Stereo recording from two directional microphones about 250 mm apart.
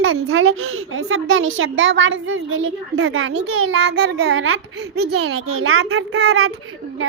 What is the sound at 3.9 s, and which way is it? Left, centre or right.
Child singing, right.